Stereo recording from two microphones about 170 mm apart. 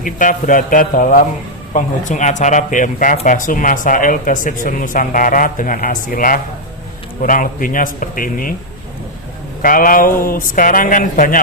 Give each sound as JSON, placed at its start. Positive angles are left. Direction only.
{"t": 0.0, "sound": "speech", "side_deg": 50}
{"t": 9.6, "sound": "speech", "side_deg": 55}